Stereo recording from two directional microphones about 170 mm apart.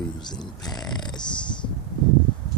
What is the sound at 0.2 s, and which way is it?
Speech, 25° left (ahead or behind).